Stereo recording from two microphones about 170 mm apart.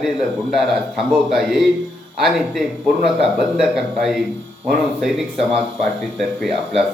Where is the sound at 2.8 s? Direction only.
70° right (ahead or behind).